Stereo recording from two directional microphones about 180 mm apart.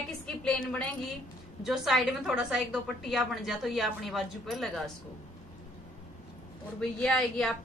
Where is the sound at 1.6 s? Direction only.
Centre (ahead or behind).